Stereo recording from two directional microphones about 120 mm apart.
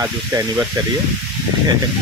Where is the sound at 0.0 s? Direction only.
20° right (ahead or behind).